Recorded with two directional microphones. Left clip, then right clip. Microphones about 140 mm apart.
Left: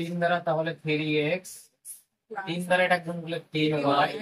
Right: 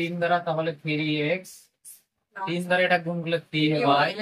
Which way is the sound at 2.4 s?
25° right (ahead or behind).